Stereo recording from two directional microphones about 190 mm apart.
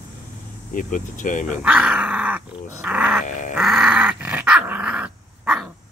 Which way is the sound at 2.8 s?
5° right (ahead or behind).